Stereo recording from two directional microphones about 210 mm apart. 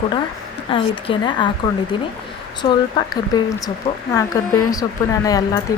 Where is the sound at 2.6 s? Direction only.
20° left (ahead or behind).